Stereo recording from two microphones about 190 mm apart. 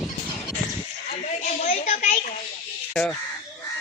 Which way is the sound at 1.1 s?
35° left (ahead or behind).